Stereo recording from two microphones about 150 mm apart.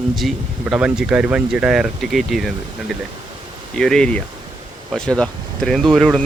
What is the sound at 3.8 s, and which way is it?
Speech, 5° left (ahead or behind).